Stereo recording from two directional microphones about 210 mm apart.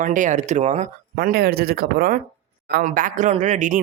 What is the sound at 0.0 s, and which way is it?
Speech, 35° right (ahead or behind).